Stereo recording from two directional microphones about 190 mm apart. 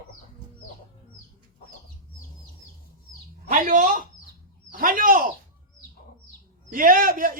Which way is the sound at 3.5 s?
40° right (ahead or behind).